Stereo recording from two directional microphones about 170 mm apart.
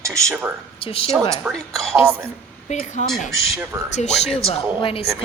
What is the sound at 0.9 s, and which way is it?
Speech, 35° left (ahead or behind).